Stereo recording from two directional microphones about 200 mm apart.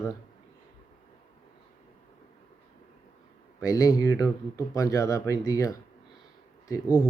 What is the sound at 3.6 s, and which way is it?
Speech, 15° left (ahead or behind).